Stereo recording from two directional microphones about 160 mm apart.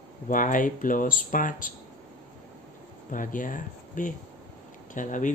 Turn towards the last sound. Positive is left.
turn(degrees=55)  # may be behind; listen again after turning